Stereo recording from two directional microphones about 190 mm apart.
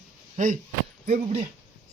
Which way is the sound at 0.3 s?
45° right (ahead or behind).